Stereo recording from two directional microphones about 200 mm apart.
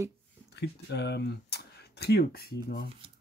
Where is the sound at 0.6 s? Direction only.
55° left (ahead or behind).